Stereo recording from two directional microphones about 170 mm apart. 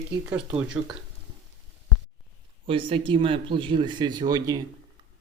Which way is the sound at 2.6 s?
30° right (ahead or behind).